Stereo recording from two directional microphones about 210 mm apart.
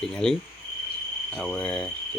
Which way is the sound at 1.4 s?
5° left (ahead or behind).